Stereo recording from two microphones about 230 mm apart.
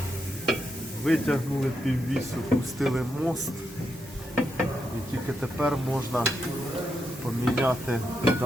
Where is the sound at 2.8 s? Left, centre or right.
Centre.